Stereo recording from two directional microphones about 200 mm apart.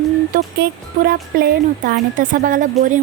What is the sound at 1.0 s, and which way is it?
A woman's voice, 50° right (ahead or behind).